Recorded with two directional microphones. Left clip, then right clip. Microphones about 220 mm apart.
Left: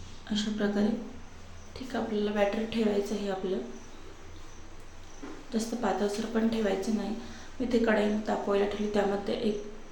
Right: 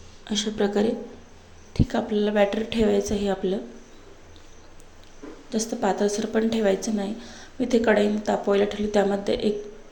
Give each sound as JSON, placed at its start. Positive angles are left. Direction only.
{"t": 0.3, "sound": "a woman's voice", "side_deg": -35}
{"t": 5.5, "sound": "a woman's voice", "side_deg": -30}